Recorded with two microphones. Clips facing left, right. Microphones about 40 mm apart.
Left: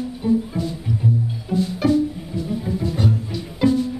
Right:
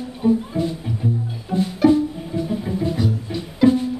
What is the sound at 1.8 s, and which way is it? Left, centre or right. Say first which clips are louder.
Music: right 5 dB; right.